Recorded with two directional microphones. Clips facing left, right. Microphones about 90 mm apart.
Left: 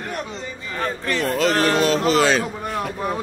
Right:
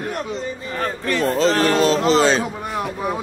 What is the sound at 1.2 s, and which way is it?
Speech, 35° right (ahead or behind).